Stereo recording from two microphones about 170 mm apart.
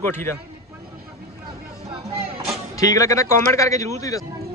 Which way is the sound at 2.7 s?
20° left (ahead or behind).